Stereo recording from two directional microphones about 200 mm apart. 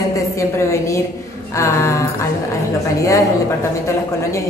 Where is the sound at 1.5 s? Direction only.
15° left (ahead or behind).